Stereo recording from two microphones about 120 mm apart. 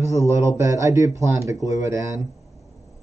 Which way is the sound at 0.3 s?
25° right (ahead or behind).